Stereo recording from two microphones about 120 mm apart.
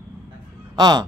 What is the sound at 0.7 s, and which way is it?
Speech, 35° right (ahead or behind).